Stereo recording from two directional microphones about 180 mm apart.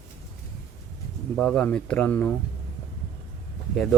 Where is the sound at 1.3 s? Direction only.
5° left (ahead or behind).